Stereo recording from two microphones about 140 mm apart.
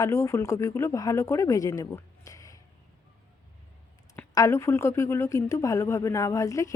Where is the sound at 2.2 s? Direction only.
25° left (ahead or behind).